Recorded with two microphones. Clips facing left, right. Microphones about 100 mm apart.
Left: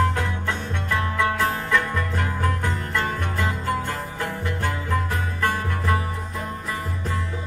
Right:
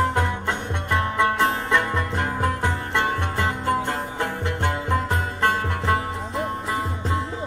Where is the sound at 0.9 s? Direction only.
20° right (ahead or behind).